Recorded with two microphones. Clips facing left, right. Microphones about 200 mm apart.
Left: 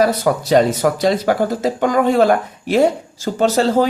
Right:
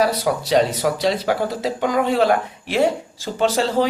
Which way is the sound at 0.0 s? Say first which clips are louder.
Left 4 dB; 50° left (ahead or behind).